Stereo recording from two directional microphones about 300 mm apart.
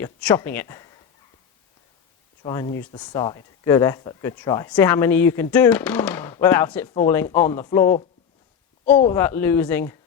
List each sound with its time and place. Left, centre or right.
0.0 s speech: centre
2.4 s speech: centre